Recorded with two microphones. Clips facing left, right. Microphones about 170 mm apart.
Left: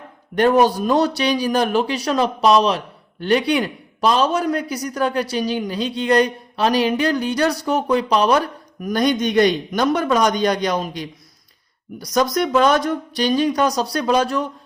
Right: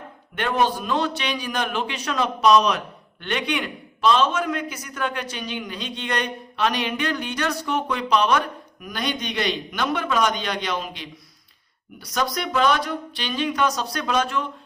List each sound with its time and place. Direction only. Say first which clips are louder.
0.3 s a man's voice: left 8 dB; 40° left (ahead or behind)